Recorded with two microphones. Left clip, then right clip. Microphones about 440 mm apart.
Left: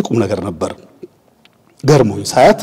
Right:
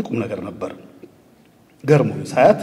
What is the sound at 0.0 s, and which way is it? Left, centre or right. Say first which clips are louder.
Speech: left 8 dB; left.